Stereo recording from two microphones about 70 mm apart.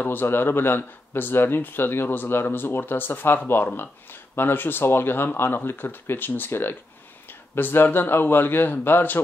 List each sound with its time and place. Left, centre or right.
0.0 s speech: left